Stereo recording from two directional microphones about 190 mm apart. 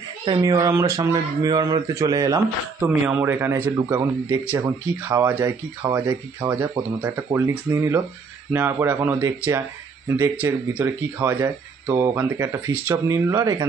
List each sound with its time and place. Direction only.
0.2 s speech: 20° right (ahead or behind)
3.1 s speech: 10° right (ahead or behind)